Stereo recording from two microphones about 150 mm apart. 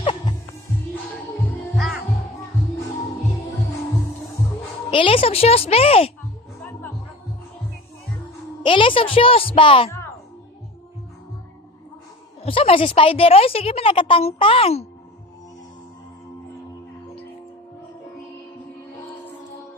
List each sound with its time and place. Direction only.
1.7 s music: centre (ahead or behind)
4.9 s a woman's voice: 35° left (ahead or behind)
8.6 s a woman's voice: 35° left (ahead or behind)
12.4 s a woman's voice: 40° left (ahead or behind)